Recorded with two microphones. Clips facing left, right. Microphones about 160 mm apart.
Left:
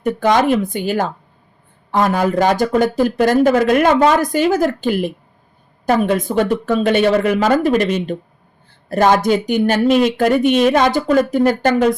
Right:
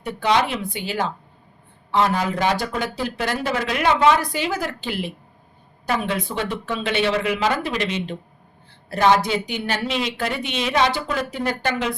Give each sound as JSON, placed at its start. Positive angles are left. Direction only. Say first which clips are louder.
{"t": 0.0, "sound": "speech", "louder": "left 6 dB", "side_deg": 45}